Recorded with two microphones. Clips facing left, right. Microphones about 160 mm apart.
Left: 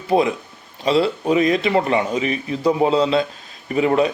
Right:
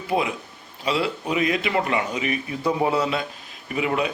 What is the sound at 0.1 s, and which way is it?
Speech, 35° left (ahead or behind).